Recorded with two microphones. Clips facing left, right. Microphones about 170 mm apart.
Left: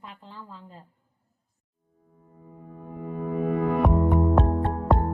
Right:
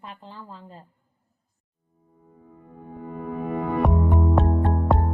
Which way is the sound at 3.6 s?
Centre (ahead or behind).